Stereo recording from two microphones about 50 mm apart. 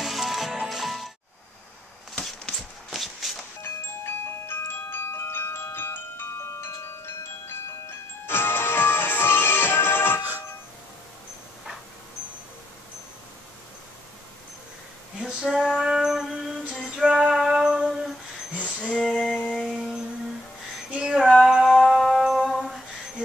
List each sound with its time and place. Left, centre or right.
0.0 s music: centre
2.9 s shuffle: centre
3.6 s wind chime: left
6.5 s wind chime: left
8.3 s music: left
15.1 s female singing: centre
15.6 s music: centre
18.6 s female singing: left
18.9 s female singing: centre
19.6 s music: centre
20.9 s female singing: centre
21.5 s music: centre